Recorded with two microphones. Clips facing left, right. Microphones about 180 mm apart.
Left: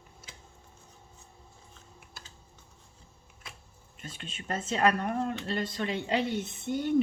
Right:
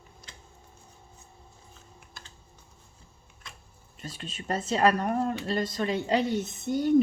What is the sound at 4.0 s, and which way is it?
Speech, 35° right (ahead or behind).